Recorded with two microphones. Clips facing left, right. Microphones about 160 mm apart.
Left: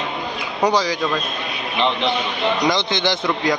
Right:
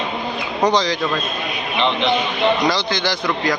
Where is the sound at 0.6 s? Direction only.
10° left (ahead or behind).